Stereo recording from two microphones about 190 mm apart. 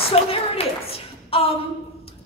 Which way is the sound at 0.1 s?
30° left (ahead or behind).